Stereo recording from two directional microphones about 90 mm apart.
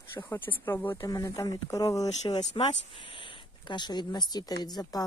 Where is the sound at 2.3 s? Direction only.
65° left (ahead or behind); by 5.0 s 50° left (ahead or behind).